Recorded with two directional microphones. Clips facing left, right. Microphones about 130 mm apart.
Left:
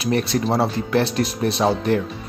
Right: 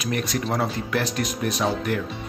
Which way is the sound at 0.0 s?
30° left (ahead or behind).